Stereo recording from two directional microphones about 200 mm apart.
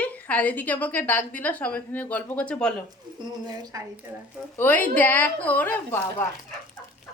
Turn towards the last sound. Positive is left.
turn(degrees=10)  # may be behind; listen again after turning